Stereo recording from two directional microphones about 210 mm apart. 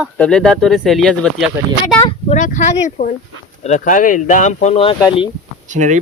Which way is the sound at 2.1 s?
35° left (ahead or behind).